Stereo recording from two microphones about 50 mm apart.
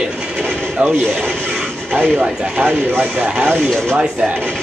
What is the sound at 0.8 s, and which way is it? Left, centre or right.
Speech, right.